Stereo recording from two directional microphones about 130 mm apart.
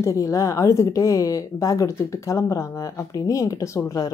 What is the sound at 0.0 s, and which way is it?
Speech, 25° left (ahead or behind).